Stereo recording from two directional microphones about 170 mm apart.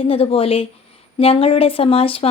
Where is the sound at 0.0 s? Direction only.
35° left (ahead or behind).